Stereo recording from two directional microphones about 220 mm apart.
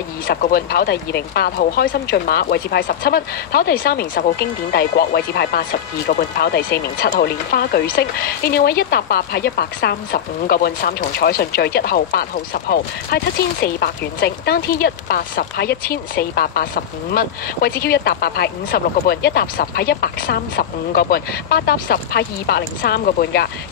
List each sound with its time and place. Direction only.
0.3 s speech: 45° left (ahead or behind)